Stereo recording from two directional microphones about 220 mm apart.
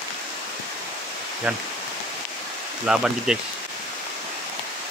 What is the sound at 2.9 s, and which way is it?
Speech, centre (ahead or behind).